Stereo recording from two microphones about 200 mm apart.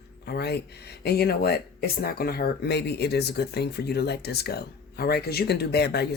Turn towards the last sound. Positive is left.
turn(degrees=55)  # may be behind; listen again after turning